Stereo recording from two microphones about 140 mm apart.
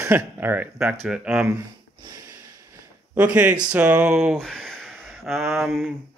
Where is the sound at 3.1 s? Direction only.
10° right (ahead or behind).